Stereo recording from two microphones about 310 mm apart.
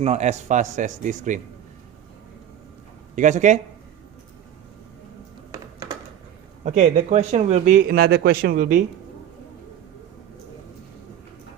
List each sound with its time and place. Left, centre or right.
0.0 s speech: right
3.2 s speech: right
6.7 s speech: right